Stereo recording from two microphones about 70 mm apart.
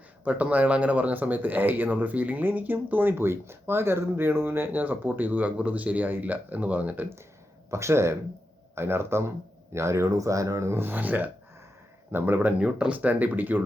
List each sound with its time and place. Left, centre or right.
0.3 s speech: right
7.7 s speech: right